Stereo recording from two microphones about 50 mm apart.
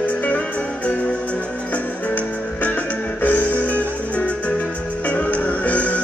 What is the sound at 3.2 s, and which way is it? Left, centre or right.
Music, left.